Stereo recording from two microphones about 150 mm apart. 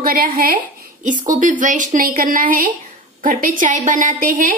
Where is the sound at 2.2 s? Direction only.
70° right (ahead or behind).